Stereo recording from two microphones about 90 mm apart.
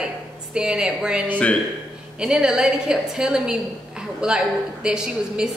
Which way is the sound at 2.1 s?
10° right (ahead or behind).